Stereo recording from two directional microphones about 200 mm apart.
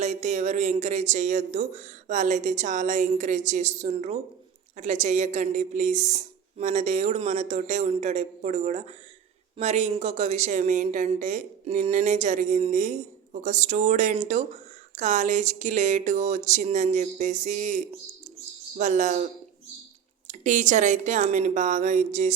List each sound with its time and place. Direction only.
0.0 s speech: 35° right (ahead or behind)